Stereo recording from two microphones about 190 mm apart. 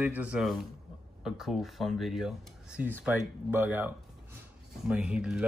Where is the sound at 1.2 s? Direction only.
Centre (ahead or behind).